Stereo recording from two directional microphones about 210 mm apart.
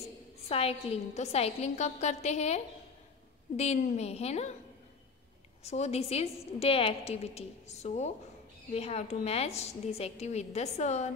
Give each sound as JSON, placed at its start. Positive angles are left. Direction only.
{"t": 0.5, "sound": "a woman's voice", "side_deg": 30}
{"t": 5.6, "sound": "a woman's voice", "side_deg": 30}